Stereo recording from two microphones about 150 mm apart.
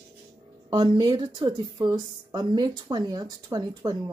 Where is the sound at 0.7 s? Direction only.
30° right (ahead or behind).